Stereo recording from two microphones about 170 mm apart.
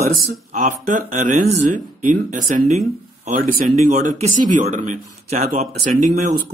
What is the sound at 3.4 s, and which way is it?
Speech, 55° right (ahead or behind).